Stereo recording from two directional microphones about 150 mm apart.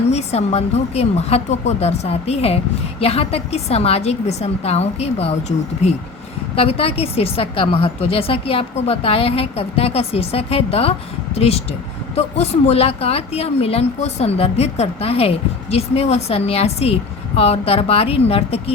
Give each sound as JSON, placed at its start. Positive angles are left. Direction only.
{"t": 0.1, "sound": "a woman's voice", "side_deg": 45}